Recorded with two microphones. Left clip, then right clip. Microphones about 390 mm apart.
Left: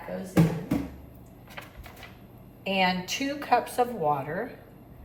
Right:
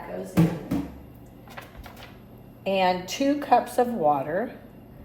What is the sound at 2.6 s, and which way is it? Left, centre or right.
A woman's voice, centre.